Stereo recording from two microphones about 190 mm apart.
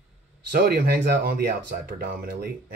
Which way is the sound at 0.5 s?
55° right (ahead or behind).